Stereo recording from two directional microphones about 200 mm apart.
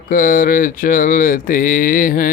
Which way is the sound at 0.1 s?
45° left (ahead or behind).